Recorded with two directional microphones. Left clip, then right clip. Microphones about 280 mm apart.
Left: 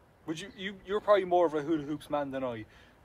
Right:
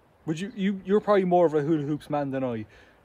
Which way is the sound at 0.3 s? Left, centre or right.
Right.